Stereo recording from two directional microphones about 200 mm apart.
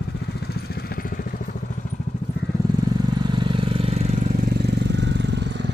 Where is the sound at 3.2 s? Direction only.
25° right (ahead or behind).